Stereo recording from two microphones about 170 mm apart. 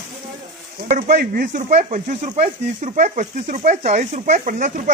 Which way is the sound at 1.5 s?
45° right (ahead or behind).